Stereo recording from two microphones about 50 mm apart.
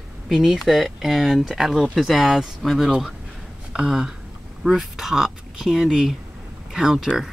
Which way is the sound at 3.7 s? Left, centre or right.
Centre.